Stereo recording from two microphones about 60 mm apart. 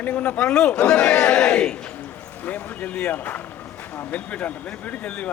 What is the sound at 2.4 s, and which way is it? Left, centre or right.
A man's voice, left.